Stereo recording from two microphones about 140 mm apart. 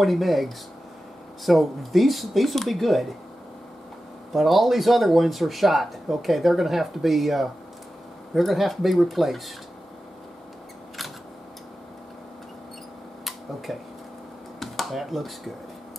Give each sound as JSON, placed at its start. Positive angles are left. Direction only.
{"t": 0.0, "sound": "speech", "side_deg": 0}
{"t": 4.3, "sound": "speech", "side_deg": 0}
{"t": 13.7, "sound": "speech", "side_deg": 0}